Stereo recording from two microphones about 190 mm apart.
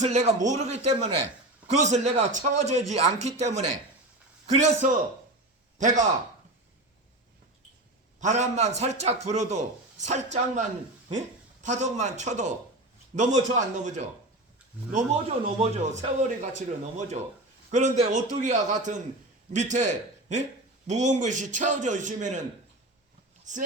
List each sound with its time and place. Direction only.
0.0 s speech: 35° right (ahead or behind)
4.6 s a man's voice: 40° right (ahead or behind)
8.2 s a man's voice: 40° right (ahead or behind)
23.5 s speech: 40° right (ahead or behind)